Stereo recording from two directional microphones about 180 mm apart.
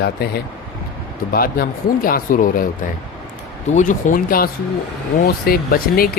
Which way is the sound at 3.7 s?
45° left (ahead or behind).